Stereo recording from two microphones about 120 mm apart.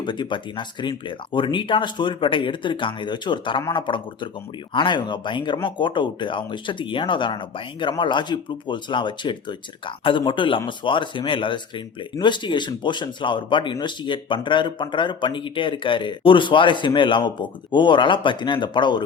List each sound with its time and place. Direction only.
0.0 s speech: 40° left (ahead or behind)